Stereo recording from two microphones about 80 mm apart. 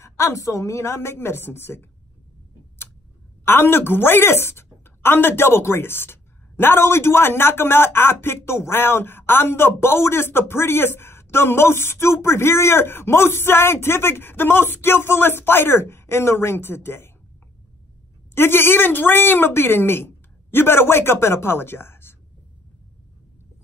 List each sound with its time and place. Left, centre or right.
0.0 s a woman's voice: left
3.4 s a woman's voice: left
18.3 s speech: left